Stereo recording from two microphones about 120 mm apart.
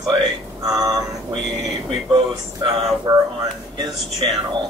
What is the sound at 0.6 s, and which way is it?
A man's voice, 35° right (ahead or behind).